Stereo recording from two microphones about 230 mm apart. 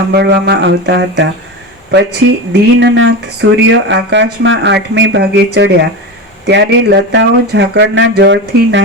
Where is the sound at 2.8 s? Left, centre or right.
Right.